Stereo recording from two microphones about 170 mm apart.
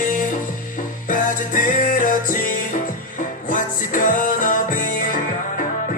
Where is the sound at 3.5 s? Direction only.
55° left (ahead or behind).